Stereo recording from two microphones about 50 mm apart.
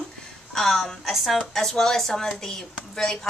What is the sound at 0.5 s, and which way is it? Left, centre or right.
Speech, centre.